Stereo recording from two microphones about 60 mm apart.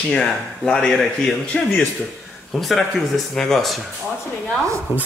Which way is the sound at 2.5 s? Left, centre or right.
Centre.